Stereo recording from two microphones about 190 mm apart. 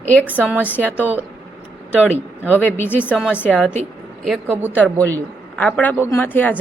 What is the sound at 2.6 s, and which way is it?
Speech, 10° left (ahead or behind).